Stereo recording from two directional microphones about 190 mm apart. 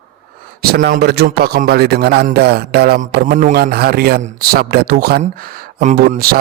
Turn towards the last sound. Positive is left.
turn(degrees=-50)  # may be behind; listen again after turning